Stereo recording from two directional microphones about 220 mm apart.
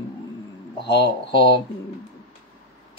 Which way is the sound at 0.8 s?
20° left (ahead or behind).